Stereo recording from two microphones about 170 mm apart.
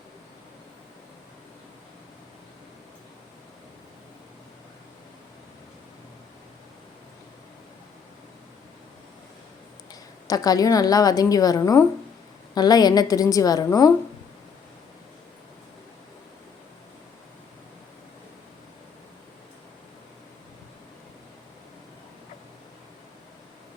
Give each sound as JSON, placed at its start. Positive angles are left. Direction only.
{"t": 9.9, "sound": "a woman's voice", "side_deg": 20}